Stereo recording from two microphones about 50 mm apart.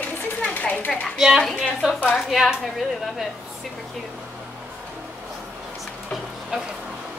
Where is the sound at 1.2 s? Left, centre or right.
Centre.